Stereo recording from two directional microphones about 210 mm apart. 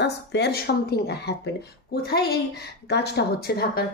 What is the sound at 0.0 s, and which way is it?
A woman's voice, 55° left (ahead or behind).